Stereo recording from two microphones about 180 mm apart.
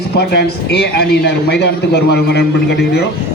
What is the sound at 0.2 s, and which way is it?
Speech, 65° left (ahead or behind).